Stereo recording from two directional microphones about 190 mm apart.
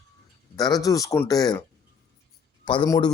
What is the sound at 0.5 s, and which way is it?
Speech, 20° left (ahead or behind).